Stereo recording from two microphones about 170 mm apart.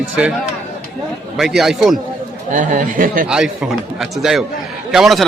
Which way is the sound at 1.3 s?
Centre (ahead or behind).